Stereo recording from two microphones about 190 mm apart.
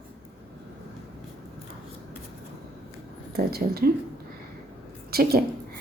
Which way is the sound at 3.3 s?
55° right (ahead or behind).